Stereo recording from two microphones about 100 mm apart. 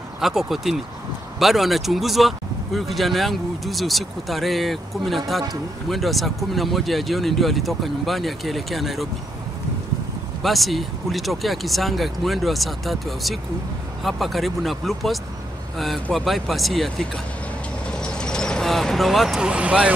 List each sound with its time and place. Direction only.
0.2 s speech: 5° right (ahead or behind)
10.4 s speech: centre (ahead or behind)
17.9 s vehicle: 10° left (ahead or behind); by 19.9 s 10° right (ahead or behind)